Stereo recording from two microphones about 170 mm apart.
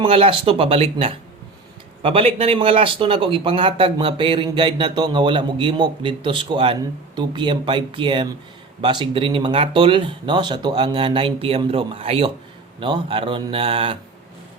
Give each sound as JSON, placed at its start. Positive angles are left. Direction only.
{"t": 0.0, "sound": "speech", "side_deg": -35}